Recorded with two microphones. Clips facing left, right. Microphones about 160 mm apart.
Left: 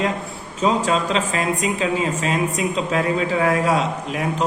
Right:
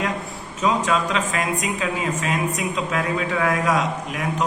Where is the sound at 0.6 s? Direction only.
30° left (ahead or behind).